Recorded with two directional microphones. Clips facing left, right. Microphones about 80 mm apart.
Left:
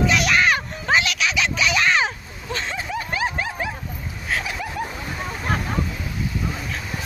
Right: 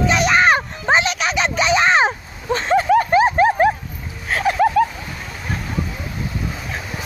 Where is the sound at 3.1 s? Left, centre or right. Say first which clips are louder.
Right 11 dB; right.